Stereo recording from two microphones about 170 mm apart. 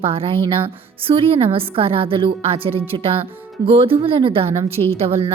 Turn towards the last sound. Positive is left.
turn(degrees=-35)  # may be behind; listen again after turning